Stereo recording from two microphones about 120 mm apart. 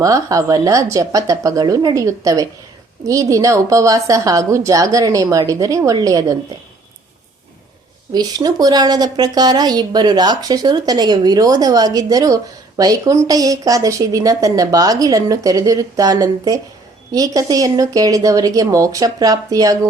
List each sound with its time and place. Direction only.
0.0 s a woman's voice: 30° right (ahead or behind)
8.1 s a woman's voice: 35° right (ahead or behind)